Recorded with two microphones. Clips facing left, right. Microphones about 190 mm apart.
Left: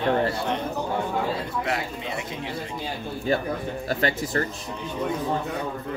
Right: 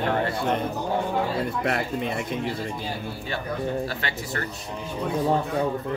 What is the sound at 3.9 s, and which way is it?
Speech, 40° left (ahead or behind).